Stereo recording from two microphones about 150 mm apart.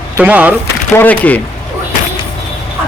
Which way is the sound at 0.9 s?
10° left (ahead or behind).